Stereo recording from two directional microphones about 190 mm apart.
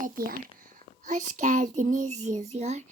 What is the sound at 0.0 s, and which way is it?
A child's voice, 50° right (ahead or behind).